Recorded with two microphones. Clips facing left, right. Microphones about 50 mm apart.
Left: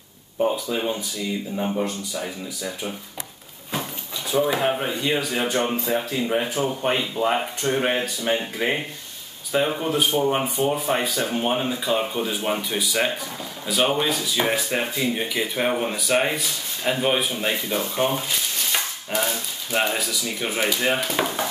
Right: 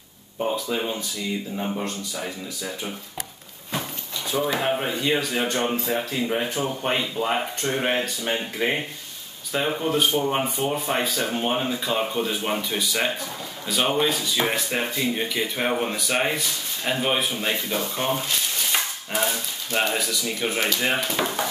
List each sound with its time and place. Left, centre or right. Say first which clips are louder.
1.6 s speech: left 3 dB; centre
4.3 s speech: left 2 dB; centre
18.7 s dog: even; centre
19.8 s speech: even; centre